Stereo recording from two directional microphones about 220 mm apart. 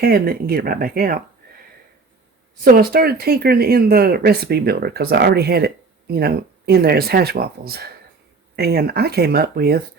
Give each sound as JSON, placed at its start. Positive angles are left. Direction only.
{"t": 0.0, "sound": "speech", "side_deg": -45}
{"t": 2.6, "sound": "speech", "side_deg": -45}